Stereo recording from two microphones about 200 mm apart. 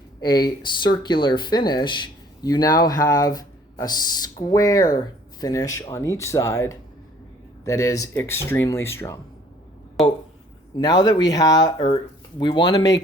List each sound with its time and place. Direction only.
0.2 s speech: 20° left (ahead or behind)
10.0 s speech: centre (ahead or behind)
10.8 s speech: 20° left (ahead or behind)